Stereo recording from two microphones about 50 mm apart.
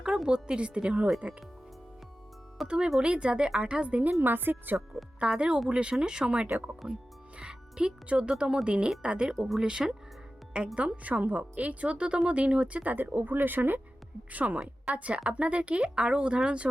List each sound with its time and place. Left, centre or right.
0.0 s a woman's voice: centre
2.6 s a woman's voice: centre
4.2 s speech: right
5.2 s a woman's voice: right
10.8 s a woman's voice: right